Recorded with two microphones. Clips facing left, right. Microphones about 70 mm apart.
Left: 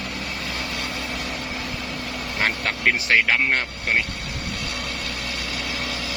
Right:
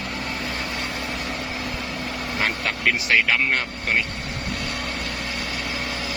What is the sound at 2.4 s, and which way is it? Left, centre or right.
Speech, left.